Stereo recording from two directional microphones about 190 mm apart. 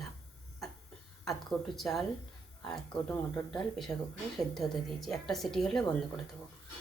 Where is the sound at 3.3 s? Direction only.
5° left (ahead or behind).